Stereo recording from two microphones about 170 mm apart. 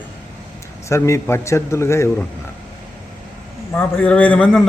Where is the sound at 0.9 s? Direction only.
15° left (ahead or behind).